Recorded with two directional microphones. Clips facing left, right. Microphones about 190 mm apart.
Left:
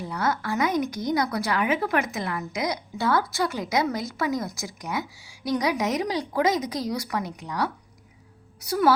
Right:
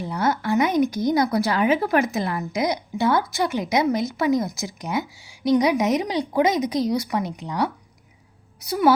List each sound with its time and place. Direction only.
0.0 s a woman's voice: 25° right (ahead or behind)